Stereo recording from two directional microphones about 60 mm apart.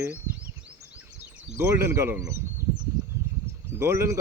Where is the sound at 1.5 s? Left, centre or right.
Right.